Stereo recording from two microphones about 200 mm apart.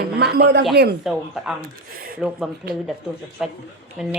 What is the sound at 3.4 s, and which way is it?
Speech, 5° right (ahead or behind).